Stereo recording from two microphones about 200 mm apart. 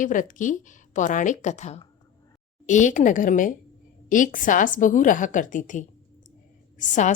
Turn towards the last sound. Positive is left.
turn(degrees=40)  # may be behind; listen again after turning